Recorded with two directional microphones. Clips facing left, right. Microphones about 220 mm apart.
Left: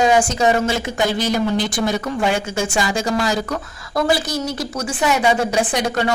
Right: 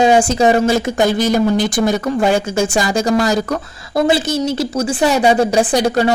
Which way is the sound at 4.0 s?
25° right (ahead or behind).